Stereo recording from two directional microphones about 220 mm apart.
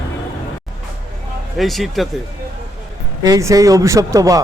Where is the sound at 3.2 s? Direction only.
15° right (ahead or behind).